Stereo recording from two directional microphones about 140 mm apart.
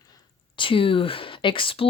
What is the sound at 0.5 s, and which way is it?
Speech, 40° left (ahead or behind).